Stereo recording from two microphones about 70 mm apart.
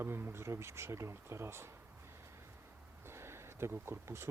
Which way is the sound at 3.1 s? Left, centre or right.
Right.